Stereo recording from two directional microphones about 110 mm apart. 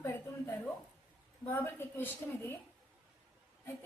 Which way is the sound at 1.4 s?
20° left (ahead or behind).